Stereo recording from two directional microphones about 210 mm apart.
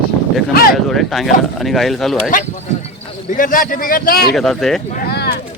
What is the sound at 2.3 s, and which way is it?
Speech, 35° left (ahead or behind).